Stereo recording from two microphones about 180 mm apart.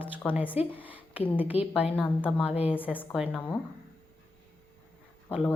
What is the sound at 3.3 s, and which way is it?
Speech, 5° left (ahead or behind).